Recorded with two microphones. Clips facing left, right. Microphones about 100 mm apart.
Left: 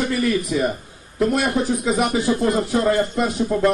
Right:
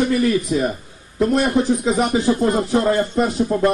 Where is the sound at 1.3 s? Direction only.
30° right (ahead or behind).